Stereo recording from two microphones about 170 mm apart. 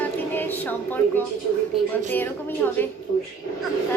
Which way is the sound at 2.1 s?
10° left (ahead or behind).